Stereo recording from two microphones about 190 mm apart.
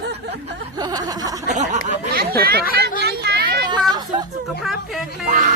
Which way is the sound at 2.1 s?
55° right (ahead or behind).